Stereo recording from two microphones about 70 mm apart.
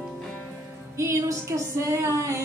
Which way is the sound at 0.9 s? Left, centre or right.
Right.